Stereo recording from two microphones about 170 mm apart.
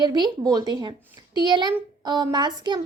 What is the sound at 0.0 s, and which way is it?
A child's voice, 25° right (ahead or behind).